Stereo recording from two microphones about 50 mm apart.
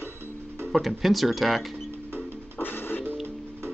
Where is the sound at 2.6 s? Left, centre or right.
Left.